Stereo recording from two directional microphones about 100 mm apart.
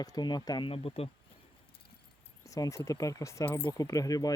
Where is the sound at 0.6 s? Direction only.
65° left (ahead or behind).